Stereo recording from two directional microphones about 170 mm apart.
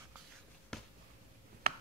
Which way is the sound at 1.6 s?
65° right (ahead or behind).